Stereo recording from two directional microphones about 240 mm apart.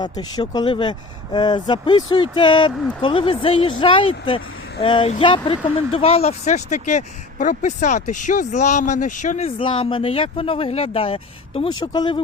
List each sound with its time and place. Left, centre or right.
0.0 s speech: centre